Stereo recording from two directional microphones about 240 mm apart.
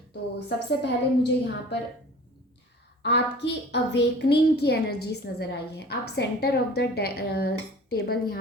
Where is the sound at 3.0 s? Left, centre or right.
Left.